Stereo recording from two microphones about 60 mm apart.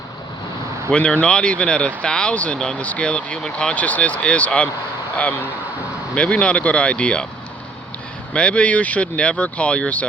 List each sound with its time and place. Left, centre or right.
0.9 s speech: left
3.8 s speech: left
6.1 s speech: centre
8.3 s speech: centre